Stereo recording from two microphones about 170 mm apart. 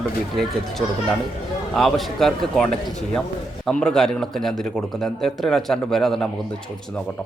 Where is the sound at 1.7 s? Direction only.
Centre (ahead or behind).